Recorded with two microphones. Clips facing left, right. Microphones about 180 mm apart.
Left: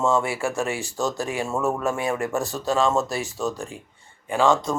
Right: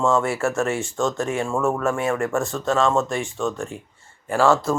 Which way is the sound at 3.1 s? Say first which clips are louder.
Right 2 dB; 35° left (ahead or behind).